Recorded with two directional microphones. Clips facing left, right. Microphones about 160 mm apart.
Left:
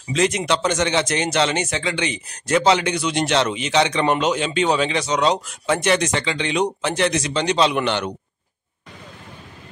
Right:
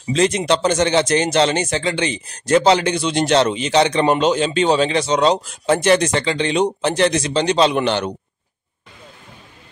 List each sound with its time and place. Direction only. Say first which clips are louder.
0.1 s speech: right 3 dB; 30° right (ahead or behind)